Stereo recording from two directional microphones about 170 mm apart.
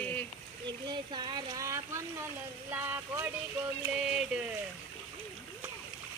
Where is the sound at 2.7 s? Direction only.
15° right (ahead or behind).